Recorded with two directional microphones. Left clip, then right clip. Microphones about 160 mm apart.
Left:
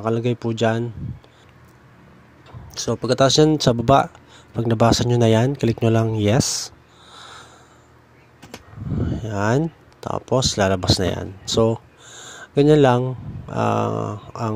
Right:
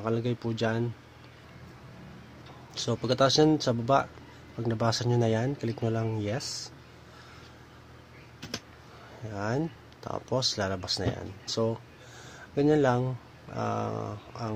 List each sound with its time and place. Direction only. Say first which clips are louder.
0.0 s speech: left 9 dB; 45° left (ahead or behind)
2.7 s speech: left 8 dB; 40° left (ahead or behind)
9.2 s speech: left 11 dB; 55° left (ahead or behind)
9.9 s speech: left 10 dB; 45° left (ahead or behind)